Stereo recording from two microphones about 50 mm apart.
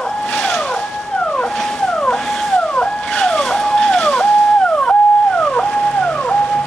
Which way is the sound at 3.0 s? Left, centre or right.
Centre.